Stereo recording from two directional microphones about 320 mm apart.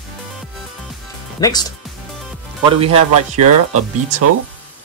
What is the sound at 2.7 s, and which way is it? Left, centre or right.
Speech, centre.